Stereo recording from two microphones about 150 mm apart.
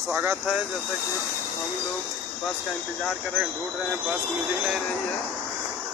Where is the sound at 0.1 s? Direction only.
15° right (ahead or behind).